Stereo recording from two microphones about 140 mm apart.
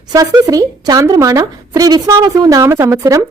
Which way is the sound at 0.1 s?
25° right (ahead or behind).